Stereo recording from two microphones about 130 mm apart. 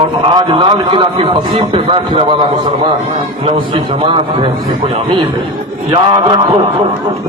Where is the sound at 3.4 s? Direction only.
40° right (ahead or behind).